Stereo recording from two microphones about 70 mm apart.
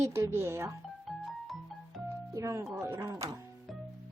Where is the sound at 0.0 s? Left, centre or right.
Right.